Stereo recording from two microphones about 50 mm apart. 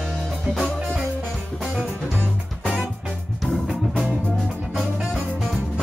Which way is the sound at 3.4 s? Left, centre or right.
Centre.